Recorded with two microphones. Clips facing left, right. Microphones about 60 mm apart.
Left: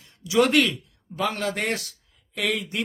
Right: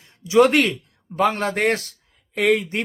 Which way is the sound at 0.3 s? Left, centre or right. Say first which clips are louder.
Right 4 dB; right.